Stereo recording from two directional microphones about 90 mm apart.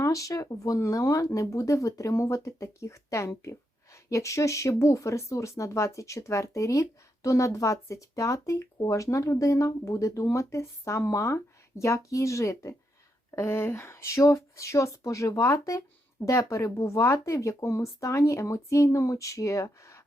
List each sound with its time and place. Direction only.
0.0 s speech: 40° left (ahead or behind)